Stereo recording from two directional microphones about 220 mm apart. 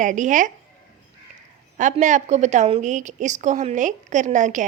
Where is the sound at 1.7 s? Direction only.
35° right (ahead or behind).